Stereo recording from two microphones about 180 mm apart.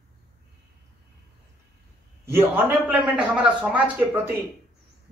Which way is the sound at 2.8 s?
10° right (ahead or behind).